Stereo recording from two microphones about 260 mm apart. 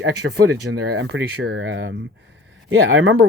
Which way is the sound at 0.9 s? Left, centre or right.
Right.